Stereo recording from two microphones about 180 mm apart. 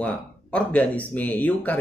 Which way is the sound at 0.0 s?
5° left (ahead or behind).